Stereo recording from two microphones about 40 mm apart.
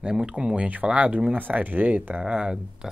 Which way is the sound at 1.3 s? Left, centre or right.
Right.